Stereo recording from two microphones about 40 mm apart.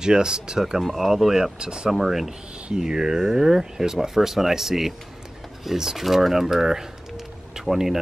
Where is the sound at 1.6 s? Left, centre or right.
Right.